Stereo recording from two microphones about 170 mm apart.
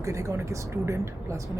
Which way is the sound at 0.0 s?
15° right (ahead or behind).